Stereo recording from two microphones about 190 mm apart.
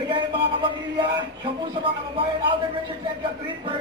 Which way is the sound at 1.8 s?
25° right (ahead or behind).